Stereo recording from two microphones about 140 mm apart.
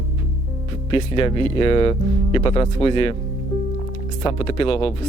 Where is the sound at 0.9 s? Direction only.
40° left (ahead or behind).